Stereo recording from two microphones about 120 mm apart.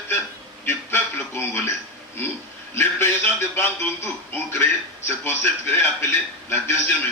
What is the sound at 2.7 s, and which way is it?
A man's voice, 20° left (ahead or behind).